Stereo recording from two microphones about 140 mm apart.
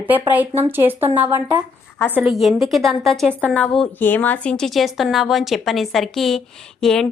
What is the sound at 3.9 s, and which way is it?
Speech, 15° left (ahead or behind).